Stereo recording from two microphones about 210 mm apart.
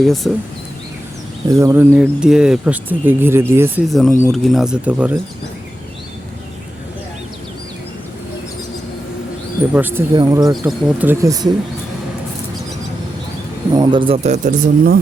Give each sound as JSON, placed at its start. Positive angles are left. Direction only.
{"t": 0.0, "sound": "speech", "side_deg": 0}
{"t": 1.5, "sound": "speech", "side_deg": -15}
{"t": 3.8, "sound": "speech", "side_deg": 0}
{"t": 9.7, "sound": "speech", "side_deg": -10}
{"t": 13.7, "sound": "speech", "side_deg": -20}